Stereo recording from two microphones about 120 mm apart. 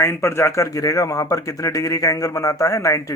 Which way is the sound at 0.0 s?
20° left (ahead or behind).